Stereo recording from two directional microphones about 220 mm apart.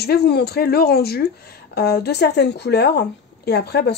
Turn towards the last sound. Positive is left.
turn(degrees=50)  # may be behind; listen again after turning